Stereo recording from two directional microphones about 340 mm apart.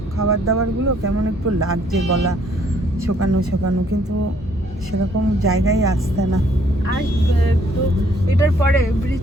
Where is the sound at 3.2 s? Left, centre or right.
Right.